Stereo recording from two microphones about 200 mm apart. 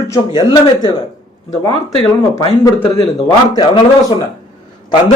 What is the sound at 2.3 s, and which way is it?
A man's voice, 15° left (ahead or behind).